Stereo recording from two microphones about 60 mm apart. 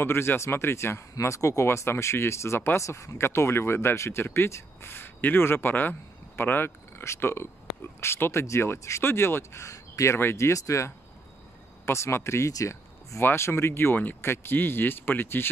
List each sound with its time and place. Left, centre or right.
0.0 s speech: left
1.2 s speech: left
10.1 s speech: left
11.8 s speech: left
12.5 s a sound: left
13.2 s speech: left